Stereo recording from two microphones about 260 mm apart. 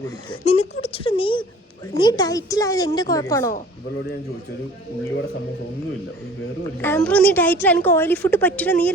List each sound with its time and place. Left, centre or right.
0.4 s a sound: left
1.9 s a woman's voice: centre
6.8 s a woman's voice: centre